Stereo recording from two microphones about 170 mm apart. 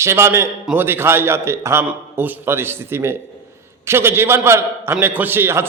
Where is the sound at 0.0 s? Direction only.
15° right (ahead or behind).